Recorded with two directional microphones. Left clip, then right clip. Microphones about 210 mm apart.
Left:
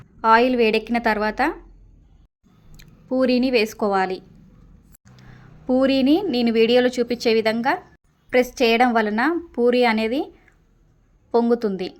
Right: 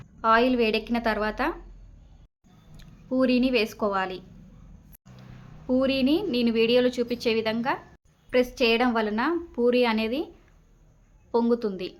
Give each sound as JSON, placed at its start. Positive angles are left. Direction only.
{"t": 0.2, "sound": "a woman's voice", "side_deg": 25}
{"t": 2.7, "sound": "speech", "side_deg": 25}
{"t": 5.6, "sound": "a woman's voice", "side_deg": 30}